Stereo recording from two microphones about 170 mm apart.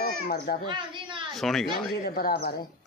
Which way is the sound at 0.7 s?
30° right (ahead or behind).